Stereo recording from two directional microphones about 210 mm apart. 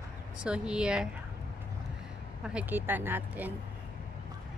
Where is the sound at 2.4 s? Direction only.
5° right (ahead or behind).